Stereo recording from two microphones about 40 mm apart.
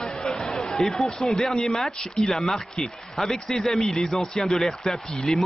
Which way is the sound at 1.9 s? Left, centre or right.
Centre.